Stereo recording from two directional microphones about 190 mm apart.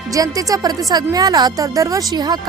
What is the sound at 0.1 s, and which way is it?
A woman's voice, 20° right (ahead or behind).